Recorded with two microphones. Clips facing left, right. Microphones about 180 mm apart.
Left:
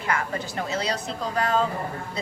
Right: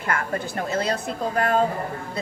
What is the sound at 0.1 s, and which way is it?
A woman's voice, 50° right (ahead or behind).